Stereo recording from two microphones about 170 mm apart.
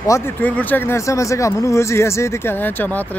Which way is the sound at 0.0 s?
15° left (ahead or behind).